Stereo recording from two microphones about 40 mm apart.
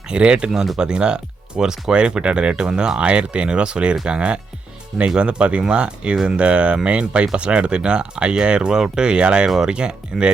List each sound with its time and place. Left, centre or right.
0.1 s speech: right